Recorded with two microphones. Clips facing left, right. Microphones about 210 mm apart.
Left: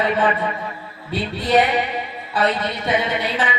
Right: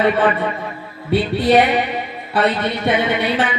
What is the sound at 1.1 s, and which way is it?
A man's voice, 60° right (ahead or behind).